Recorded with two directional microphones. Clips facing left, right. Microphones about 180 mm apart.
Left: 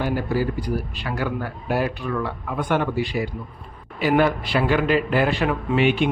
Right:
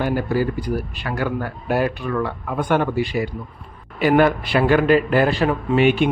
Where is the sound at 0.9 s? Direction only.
50° right (ahead or behind).